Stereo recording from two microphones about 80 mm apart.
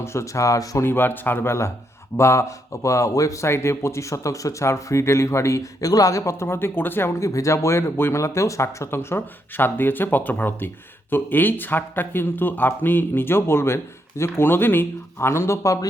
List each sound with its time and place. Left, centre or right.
0.0 s a man's voice: left
0.8 s a man's voice: left
7.2 s a man's voice: left